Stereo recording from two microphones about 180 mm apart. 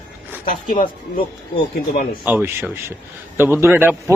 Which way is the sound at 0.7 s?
50° left (ahead or behind).